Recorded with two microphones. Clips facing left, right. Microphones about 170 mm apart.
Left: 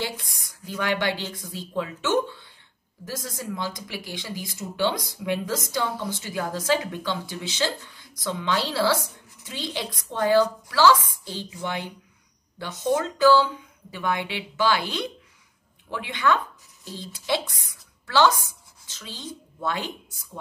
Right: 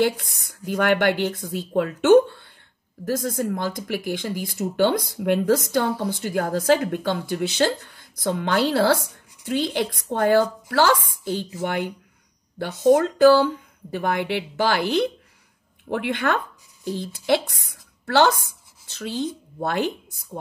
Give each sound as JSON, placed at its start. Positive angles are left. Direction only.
{"t": 0.0, "sound": "speech", "side_deg": -55}
{"t": 12.5, "sound": "a woman's voice", "side_deg": -55}